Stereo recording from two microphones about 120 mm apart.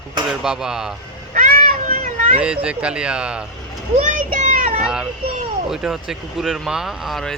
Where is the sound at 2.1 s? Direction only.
90° right.